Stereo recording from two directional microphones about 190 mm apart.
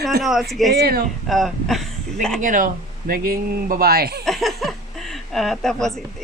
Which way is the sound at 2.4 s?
45° right (ahead or behind).